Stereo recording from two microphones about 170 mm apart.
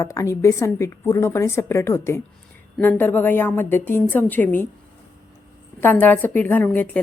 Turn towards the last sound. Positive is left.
turn(degrees=10)  # may be behind; listen again after turning